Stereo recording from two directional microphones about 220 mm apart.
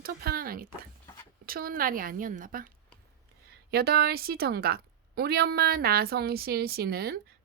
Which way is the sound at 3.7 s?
45° right (ahead or behind).